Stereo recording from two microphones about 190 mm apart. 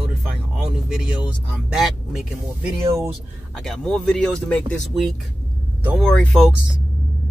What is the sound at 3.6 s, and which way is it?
Speech, centre (ahead or behind).